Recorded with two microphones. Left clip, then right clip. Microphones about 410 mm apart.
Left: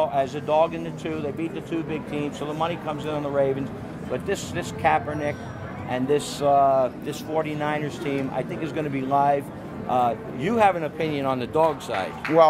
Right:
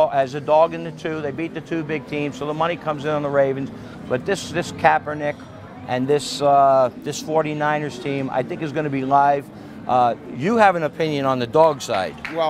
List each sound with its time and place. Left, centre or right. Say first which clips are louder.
0.0 s speech: right 5 dB; right
12.4 s speech: left 6 dB; left